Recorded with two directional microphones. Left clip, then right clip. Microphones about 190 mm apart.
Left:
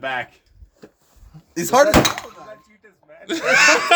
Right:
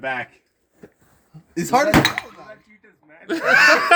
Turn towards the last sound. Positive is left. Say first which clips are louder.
# right 1 dB
turn(degrees=15)  # may be behind; listen again after turning